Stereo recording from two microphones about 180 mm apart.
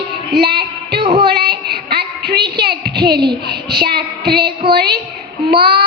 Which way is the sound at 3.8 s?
60° right (ahead or behind).